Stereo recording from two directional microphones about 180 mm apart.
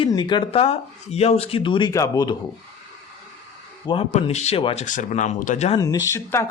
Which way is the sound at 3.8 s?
30° left (ahead or behind).